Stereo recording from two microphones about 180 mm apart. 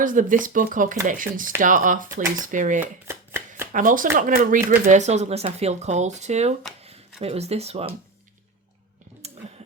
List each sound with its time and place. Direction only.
0.0 s speech: 45° right (ahead or behind)
2.8 s chopping: 15° right (ahead or behind)
3.7 s speech: 45° right (ahead or behind)
9.2 s a sound: 35° right (ahead or behind)